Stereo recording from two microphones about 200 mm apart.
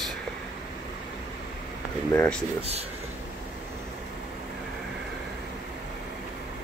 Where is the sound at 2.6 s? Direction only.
30° right (ahead or behind).